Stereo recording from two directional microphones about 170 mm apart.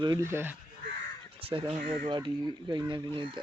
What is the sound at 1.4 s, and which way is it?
Speech, 30° right (ahead or behind).